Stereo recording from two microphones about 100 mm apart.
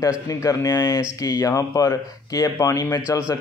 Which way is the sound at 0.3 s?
35° left (ahead or behind).